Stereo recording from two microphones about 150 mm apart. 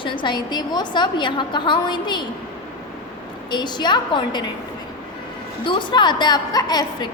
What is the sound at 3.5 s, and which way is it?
Speech, 30° left (ahead or behind).